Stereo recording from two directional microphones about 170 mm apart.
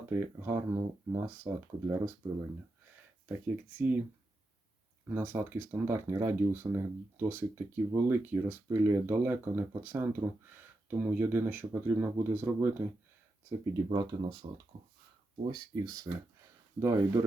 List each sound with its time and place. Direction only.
0.1 s speech: 15° right (ahead or behind)
3.2 s speech: 10° right (ahead or behind)
5.0 s speech: 10° right (ahead or behind)
13.5 s speech: 25° right (ahead or behind)
15.4 s speech: 25° right (ahead or behind)